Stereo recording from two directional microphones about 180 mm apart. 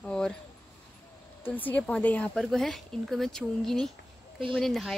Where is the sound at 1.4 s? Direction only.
10° left (ahead or behind).